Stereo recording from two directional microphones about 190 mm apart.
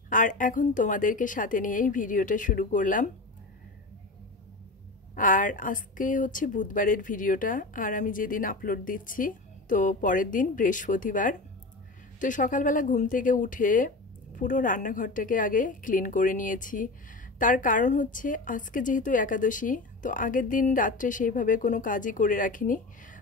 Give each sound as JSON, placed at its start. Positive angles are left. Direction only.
{"t": 0.1, "sound": "a woman's voice", "side_deg": 45}
{"t": 5.1, "sound": "a woman's voice", "side_deg": 45}